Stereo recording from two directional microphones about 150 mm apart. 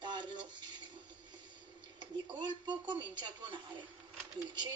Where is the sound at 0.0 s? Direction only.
30° right (ahead or behind).